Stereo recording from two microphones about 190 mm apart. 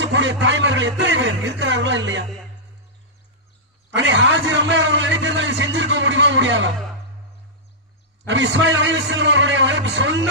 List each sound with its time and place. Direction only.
0.0 s a man's voice: 75° right (ahead or behind)
3.9 s a man's voice: 70° right (ahead or behind)
8.3 s a man's voice: 75° right (ahead or behind)